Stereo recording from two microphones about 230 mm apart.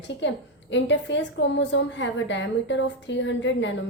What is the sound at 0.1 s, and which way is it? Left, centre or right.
A woman's voice, left.